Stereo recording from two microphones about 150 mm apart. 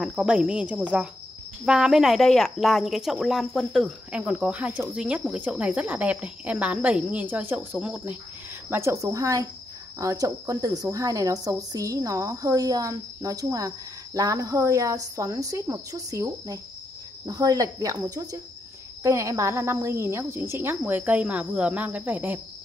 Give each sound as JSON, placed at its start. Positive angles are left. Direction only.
{"t": 0.0, "sound": "speech", "side_deg": -5}